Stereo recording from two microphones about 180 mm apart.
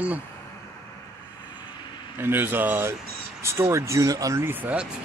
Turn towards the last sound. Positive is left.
turn(degrees=-10)  # may be behind; listen again after turning